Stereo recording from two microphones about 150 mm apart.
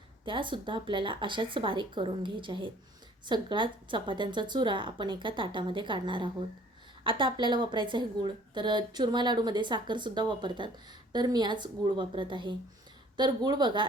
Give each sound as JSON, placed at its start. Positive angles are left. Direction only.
{"t": 0.3, "sound": "a woman's voice", "side_deg": -35}